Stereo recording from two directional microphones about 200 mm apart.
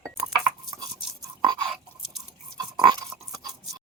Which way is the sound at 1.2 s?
20° right (ahead or behind).